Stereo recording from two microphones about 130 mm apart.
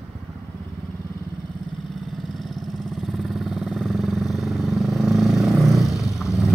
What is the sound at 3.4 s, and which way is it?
Vehicle, centre (ahead or behind).